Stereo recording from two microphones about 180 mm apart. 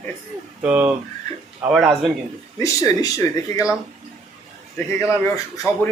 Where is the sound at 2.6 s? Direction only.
20° left (ahead or behind).